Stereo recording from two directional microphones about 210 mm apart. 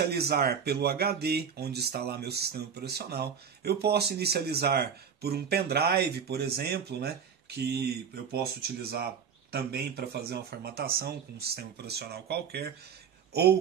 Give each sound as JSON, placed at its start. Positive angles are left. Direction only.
{"t": 0.0, "sound": "speech", "side_deg": -50}